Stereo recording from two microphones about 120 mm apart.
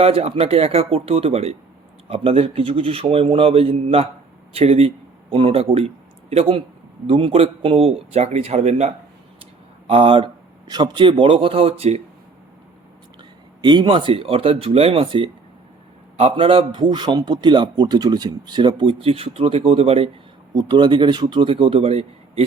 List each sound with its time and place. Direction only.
0.0 s a man's voice: 55° right (ahead or behind)
9.8 s speech: 50° right (ahead or behind)
10.7 s a man's voice: 35° right (ahead or behind); by 12.0 s 55° right (ahead or behind)
13.6 s a man's voice: 40° right (ahead or behind)
20.5 s a man's voice: 40° right (ahead or behind); by 22.4 s 55° right (ahead or behind)